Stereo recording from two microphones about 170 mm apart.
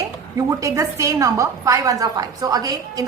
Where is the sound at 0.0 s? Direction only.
20° right (ahead or behind).